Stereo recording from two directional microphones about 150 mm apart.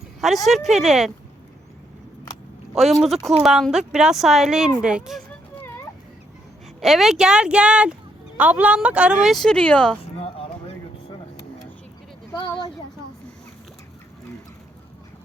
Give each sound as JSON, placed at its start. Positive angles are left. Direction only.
{"t": 0.4, "sound": "speech", "side_deg": 0}
{"t": 2.7, "sound": "speech", "side_deg": 0}
{"t": 6.8, "sound": "speech", "side_deg": 0}
{"t": 10.2, "sound": "a sound", "side_deg": 40}